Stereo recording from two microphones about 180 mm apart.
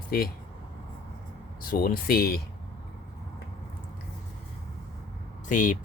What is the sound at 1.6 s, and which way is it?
Speech, 55° left (ahead or behind).